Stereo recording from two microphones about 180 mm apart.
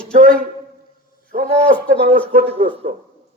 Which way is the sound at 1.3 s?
50° right (ahead or behind).